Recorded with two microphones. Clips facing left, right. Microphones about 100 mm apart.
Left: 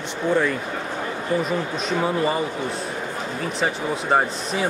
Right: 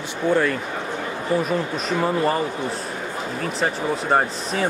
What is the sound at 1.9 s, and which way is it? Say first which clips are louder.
Speech: right 1 dB; 5° left (ahead or behind).